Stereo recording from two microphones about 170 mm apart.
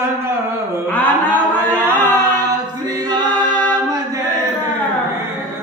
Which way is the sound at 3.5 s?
10° left (ahead or behind).